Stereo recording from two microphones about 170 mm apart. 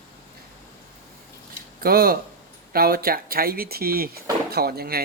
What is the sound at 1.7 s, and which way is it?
Speech, 60° right (ahead or behind).